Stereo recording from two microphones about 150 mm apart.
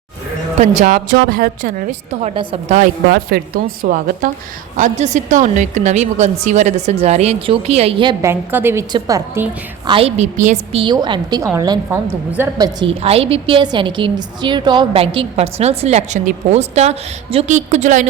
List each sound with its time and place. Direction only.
0.6 s a woman's voice: 50° right (ahead or behind)
0.9 s a woman's voice: 70° right (ahead or behind)
2.3 s a woman's voice: 35° right (ahead or behind)
2.7 s a woman's voice: 70° right (ahead or behind)
4.8 s a woman's voice: 50° right (ahead or behind)
8.2 s a woman's voice: 15° right (ahead or behind)
9.8 s a woman's voice: 35° right (ahead or behind)
10.2 s a woman's voice: 50° right (ahead or behind)
10.9 s a woman's voice: 30° right (ahead or behind)
12.9 s a woman's voice: 40° right (ahead or behind)